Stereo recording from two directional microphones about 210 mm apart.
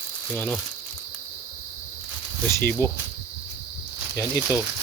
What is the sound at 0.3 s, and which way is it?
Speech, 10° left (ahead or behind).